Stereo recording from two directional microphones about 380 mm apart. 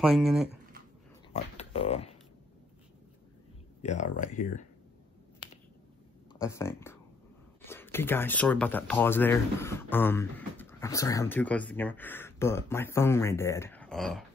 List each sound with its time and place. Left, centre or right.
0.0 s speech: centre
1.3 s speech: centre
3.8 s speech: centre
6.4 s speech: centre